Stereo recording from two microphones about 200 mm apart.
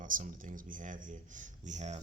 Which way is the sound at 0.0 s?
40° right (ahead or behind).